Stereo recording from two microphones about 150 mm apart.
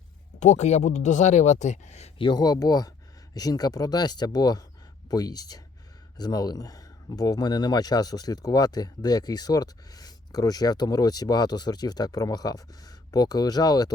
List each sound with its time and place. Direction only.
0.3 s speech: 50° left (ahead or behind); by 13.9 s 25° left (ahead or behind)